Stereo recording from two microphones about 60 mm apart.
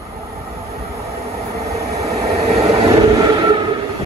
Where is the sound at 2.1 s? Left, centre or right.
Right.